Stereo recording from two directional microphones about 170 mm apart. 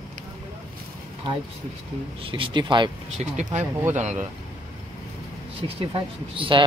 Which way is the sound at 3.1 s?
45° right (ahead or behind).